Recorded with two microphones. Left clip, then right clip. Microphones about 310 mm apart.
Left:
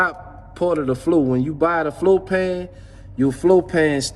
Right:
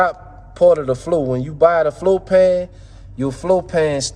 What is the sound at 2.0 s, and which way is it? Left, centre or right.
A man's voice, centre.